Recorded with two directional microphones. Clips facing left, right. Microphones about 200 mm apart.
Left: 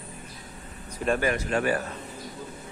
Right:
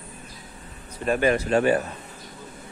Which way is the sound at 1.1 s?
25° right (ahead or behind).